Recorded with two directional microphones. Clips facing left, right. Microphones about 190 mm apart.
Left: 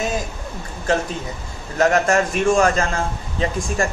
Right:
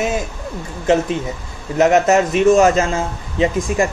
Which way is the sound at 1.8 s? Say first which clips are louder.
Right 4 dB; 20° right (ahead or behind).